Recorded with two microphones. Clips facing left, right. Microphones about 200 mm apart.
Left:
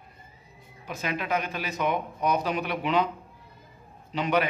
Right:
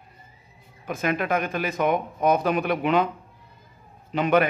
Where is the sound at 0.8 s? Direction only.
55° right (ahead or behind).